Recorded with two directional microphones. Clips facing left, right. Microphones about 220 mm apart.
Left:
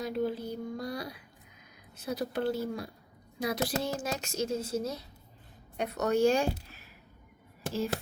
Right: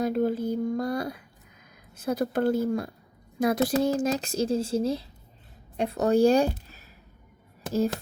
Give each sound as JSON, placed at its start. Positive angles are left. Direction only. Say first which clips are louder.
{"t": 0.0, "sound": "speech", "louder": "right 7 dB", "side_deg": -50}